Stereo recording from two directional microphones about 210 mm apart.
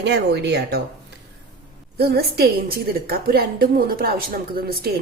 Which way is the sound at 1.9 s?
50° right (ahead or behind).